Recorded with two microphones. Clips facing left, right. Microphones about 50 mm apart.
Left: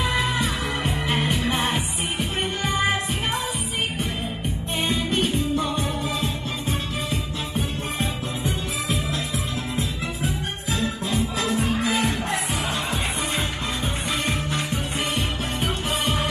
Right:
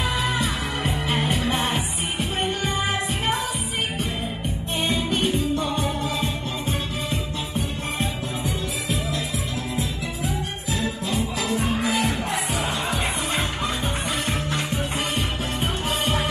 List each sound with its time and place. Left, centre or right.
0.1 s music: centre
4.8 s music: centre
9.8 s music: left
11.5 s music: centre
15.1 s music: centre